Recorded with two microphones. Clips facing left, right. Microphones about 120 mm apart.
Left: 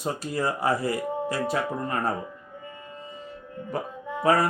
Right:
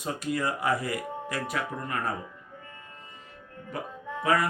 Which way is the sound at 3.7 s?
35° left (ahead or behind).